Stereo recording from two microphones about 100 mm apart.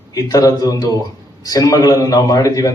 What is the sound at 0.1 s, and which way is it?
A man's voice, 40° left (ahead or behind).